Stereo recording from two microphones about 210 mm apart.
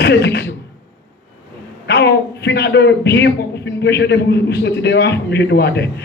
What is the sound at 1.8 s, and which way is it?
A woman's voice, 55° left (ahead or behind).